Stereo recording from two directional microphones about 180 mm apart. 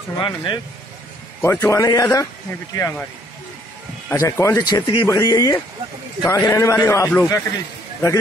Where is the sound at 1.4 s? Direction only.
10° left (ahead or behind).